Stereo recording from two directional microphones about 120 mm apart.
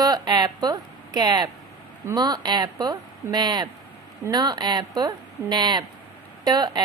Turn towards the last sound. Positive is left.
turn(degrees=-35)  # may be behind; listen again after turning